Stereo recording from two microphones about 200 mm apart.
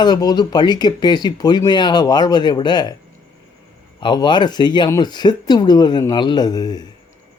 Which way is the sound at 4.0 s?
20° left (ahead or behind).